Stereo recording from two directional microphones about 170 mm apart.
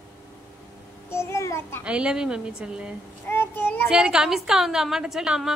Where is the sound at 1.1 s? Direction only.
15° left (ahead or behind).